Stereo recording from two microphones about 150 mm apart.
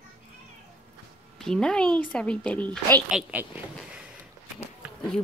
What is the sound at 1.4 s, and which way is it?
A woman's voice, 5° left (ahead or behind).